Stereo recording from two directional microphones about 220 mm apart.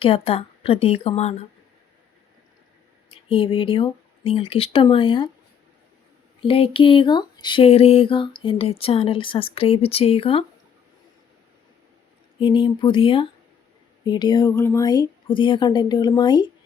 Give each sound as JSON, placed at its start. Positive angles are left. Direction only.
{"t": 0.0, "sound": "speech", "side_deg": 25}
{"t": 3.1, "sound": "speech", "side_deg": 25}
{"t": 6.4, "sound": "speech", "side_deg": 25}
{"t": 12.4, "sound": "speech", "side_deg": 20}